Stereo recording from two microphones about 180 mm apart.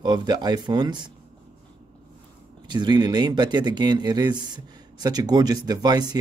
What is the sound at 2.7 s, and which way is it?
Speech, 25° right (ahead or behind).